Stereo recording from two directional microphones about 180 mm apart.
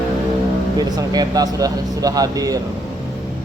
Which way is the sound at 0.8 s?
20° right (ahead or behind).